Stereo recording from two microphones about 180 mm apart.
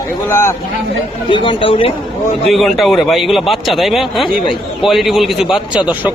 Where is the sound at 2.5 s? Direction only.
Centre (ahead or behind).